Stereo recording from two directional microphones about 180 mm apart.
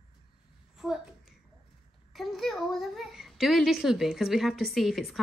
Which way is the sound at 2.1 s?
Centre (ahead or behind).